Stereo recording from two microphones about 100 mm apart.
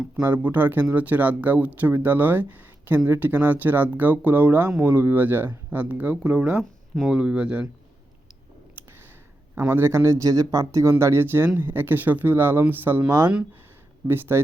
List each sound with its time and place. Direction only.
0.3 s speech: 20° right (ahead or behind)
9.6 s speech: 25° right (ahead or behind)